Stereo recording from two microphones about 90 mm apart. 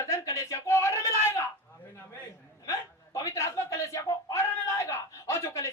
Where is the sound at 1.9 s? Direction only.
20° left (ahead or behind).